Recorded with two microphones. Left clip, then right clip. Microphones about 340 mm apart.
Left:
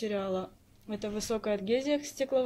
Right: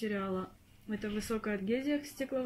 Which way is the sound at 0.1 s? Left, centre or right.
Left.